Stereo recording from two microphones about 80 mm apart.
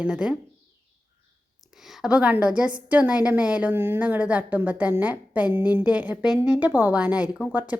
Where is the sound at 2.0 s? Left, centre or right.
Centre.